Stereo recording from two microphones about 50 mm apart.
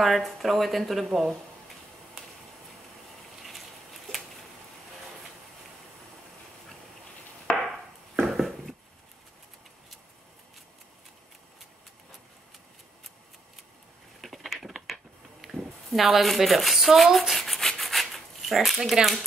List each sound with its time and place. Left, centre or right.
0.0 s speech: centre
7.5 s chop: left
8.3 s a sound: centre
14.2 s a sound: centre
15.4 s speech: centre
17.3 s rub: centre